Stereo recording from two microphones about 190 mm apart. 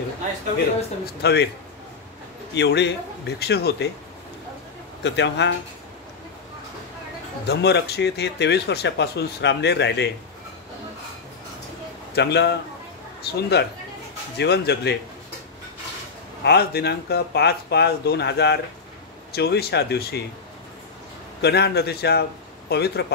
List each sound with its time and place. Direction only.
1.0 s speech: 60° left (ahead or behind)
2.5 s speech: 65° left (ahead or behind)
5.0 s a man's voice: 70° left (ahead or behind)
7.4 s speech: 60° left (ahead or behind)
12.2 s speech: 60° left (ahead or behind)
16.4 s speech: 60° left (ahead or behind)
21.4 s speech: 60° left (ahead or behind)